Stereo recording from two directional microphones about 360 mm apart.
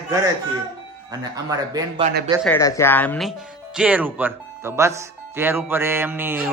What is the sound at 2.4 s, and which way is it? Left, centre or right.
Speech, centre.